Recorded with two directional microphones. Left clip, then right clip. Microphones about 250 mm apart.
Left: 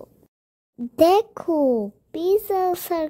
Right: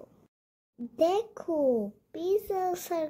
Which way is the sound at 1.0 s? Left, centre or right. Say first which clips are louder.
Left 10 dB; left.